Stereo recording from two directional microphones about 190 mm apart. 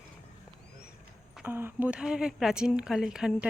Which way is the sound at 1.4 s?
10° right (ahead or behind).